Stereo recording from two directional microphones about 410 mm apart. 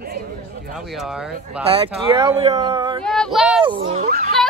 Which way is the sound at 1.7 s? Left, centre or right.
Centre.